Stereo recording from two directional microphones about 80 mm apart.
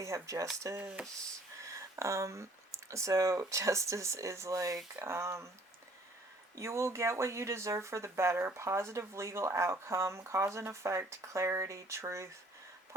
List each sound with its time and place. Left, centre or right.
0.0 s speech: right
6.6 s speech: right